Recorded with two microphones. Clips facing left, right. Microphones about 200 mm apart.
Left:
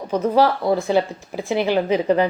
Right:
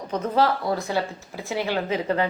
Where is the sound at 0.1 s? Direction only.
10° left (ahead or behind).